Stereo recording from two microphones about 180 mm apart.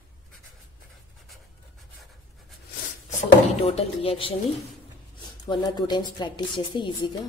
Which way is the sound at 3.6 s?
35° left (ahead or behind).